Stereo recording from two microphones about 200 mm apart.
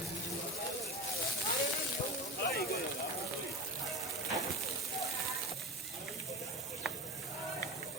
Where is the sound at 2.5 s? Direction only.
50° left (ahead or behind).